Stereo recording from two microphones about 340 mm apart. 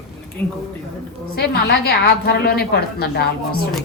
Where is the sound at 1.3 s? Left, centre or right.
Left.